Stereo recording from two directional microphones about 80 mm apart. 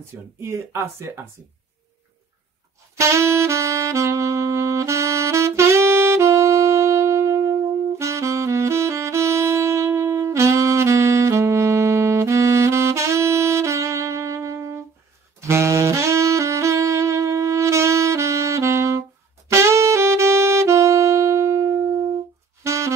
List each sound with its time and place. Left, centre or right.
0.4 s speech: right
3.0 s saxophone: right